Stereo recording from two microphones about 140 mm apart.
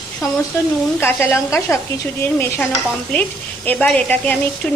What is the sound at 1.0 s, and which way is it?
A woman's voice, 15° left (ahead or behind).